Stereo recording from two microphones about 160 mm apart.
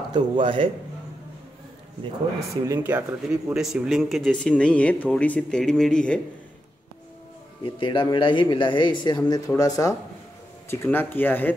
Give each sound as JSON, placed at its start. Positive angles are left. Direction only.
{"t": 0.1, "sound": "a man's voice", "side_deg": -30}
{"t": 2.6, "sound": "speech", "side_deg": -15}
{"t": 7.6, "sound": "speech", "side_deg": 35}